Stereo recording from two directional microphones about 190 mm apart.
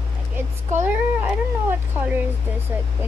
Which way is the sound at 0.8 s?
10° right (ahead or behind).